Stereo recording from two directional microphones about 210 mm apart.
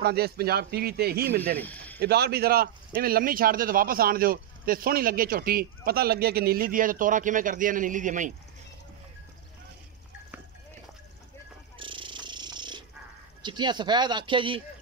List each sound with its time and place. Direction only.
0.0 s a man's voice: 50° right (ahead or behind)
1.6 s speech: 5° left (ahead or behind)
2.0 s a man's voice: 50° right (ahead or behind)
11.8 s purr: 25° right (ahead or behind)
13.4 s speech: 20° right (ahead or behind)